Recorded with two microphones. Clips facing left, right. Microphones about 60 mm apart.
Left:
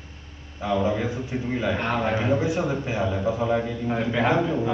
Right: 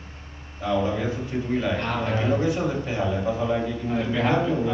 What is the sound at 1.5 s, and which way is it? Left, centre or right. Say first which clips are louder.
A man's voice: left 1 dB; centre.